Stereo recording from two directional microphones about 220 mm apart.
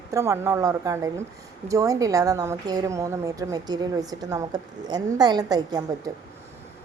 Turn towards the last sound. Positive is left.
turn(degrees=-15)  # may be behind; listen again after turning